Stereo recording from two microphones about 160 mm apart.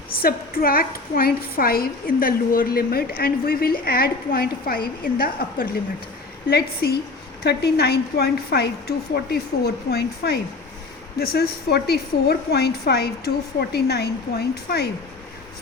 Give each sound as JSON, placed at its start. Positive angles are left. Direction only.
{"t": 0.1, "sound": "a woman's voice", "side_deg": 70}
{"t": 6.5, "sound": "a woman's voice", "side_deg": 80}
{"t": 9.3, "sound": "a woman's voice", "side_deg": 80}